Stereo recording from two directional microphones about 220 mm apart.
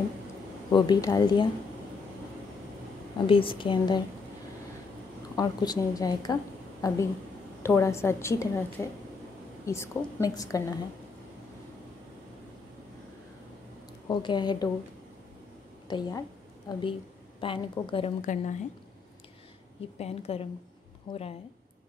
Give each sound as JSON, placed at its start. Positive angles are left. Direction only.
{"t": 0.7, "sound": "a woman's voice", "side_deg": 20}
{"t": 3.3, "sound": "a woman's voice", "side_deg": 25}
{"t": 5.3, "sound": "a woman's voice", "side_deg": 15}
{"t": 14.0, "sound": "a woman's voice", "side_deg": 20}
{"t": 15.9, "sound": "a woman's voice", "side_deg": 15}
{"t": 20.0, "sound": "a woman's voice", "side_deg": 30}